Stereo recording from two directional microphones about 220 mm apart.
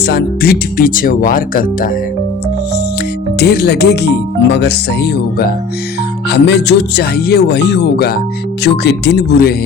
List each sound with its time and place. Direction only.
0.0 s speech: 50° left (ahead or behind)
3.3 s speech: 50° left (ahead or behind)